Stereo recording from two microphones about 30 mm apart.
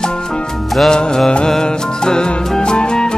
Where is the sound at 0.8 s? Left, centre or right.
Left.